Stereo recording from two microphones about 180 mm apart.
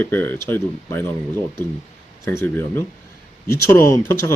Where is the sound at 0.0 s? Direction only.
10° left (ahead or behind).